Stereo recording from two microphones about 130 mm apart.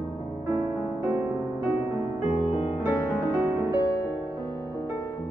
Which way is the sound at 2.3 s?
40° left (ahead or behind).